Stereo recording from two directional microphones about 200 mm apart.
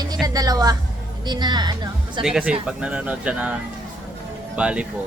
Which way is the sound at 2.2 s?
5° right (ahead or behind).